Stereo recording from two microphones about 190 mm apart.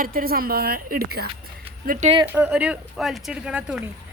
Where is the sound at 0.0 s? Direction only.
50° right (ahead or behind).